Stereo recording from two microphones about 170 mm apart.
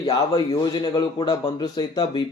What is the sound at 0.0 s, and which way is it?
A man's voice, 25° left (ahead or behind).